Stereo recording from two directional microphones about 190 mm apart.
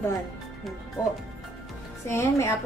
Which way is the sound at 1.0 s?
15° left (ahead or behind).